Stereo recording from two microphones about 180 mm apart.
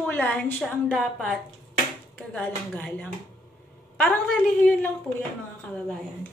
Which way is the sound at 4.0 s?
5° left (ahead or behind).